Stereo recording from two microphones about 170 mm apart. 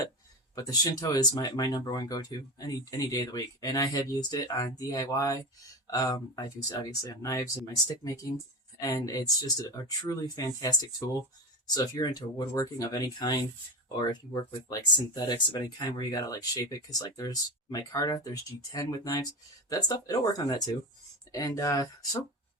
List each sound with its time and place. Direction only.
0.5 s speech: 20° left (ahead or behind)